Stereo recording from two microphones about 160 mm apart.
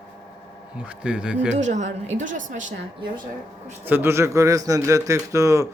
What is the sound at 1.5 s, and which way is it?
A woman's voice, 45° right (ahead or behind).